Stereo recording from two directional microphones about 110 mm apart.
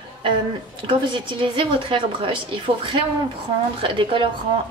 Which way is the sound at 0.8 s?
50° right (ahead or behind).